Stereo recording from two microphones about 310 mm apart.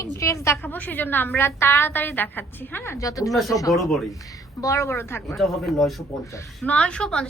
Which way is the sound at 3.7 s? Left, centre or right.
Centre.